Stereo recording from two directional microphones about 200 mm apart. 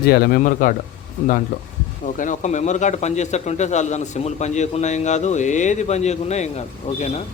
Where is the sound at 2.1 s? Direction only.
40° left (ahead or behind).